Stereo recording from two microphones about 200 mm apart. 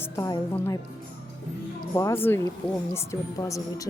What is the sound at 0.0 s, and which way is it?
Speech, 15° left (ahead or behind).